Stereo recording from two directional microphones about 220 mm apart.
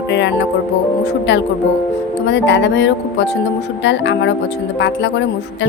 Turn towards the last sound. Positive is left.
turn(degrees=55)  # may be behind; listen again after turning